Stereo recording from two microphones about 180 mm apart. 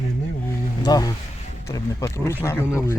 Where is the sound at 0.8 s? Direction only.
20° left (ahead or behind).